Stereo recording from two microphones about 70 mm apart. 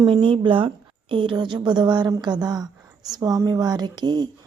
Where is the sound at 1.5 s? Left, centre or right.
Right.